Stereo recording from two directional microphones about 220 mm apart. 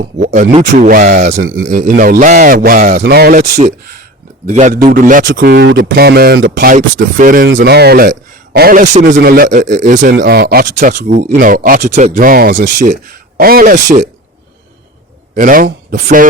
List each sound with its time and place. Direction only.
0.2 s a sound: 35° right (ahead or behind)
0.5 s speech: 35° right (ahead or behind)
4.4 s speech: 35° right (ahead or behind)
8.8 s speech: 30° right (ahead or behind)
9.1 s speech: 45° right (ahead or behind)
10.2 s speech: 45° right (ahead or behind)
15.4 s speech: 40° right (ahead or behind)